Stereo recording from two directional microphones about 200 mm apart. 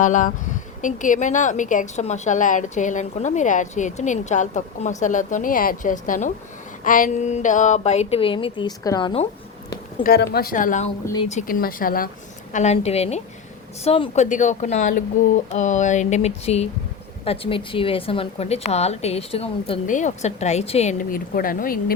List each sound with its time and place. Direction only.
0.0 s a woman's voice: 40° left (ahead or behind); by 9.2 s 25° left (ahead or behind)
10.0 s a woman's voice: 50° left (ahead or behind)
11.0 s speech: 20° left (ahead or behind)
11.3 s speech: 40° left (ahead or behind)
12.5 s a woman's voice: 35° left (ahead or behind)